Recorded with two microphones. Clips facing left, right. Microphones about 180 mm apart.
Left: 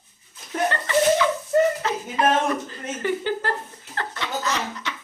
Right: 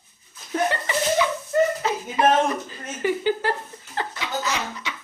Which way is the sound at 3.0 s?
10° right (ahead or behind).